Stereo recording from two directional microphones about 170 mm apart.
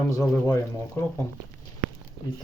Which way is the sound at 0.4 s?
20° left (ahead or behind).